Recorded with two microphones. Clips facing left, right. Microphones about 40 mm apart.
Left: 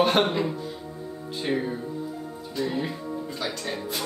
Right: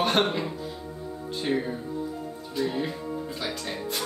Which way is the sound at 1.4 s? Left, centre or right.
Centre.